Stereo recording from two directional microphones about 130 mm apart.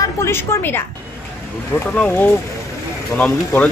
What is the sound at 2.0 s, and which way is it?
Speech, 15° left (ahead or behind).